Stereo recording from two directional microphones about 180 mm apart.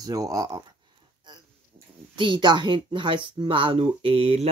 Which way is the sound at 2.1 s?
25° right (ahead or behind).